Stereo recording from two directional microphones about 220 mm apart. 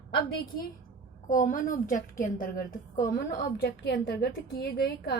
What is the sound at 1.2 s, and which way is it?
A woman's voice, 35° left (ahead or behind).